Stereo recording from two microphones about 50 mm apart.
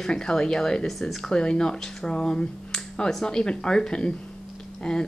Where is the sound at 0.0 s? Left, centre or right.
Centre.